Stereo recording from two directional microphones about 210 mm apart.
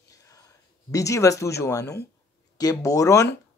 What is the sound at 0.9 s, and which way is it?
Speech, 15° left (ahead or behind).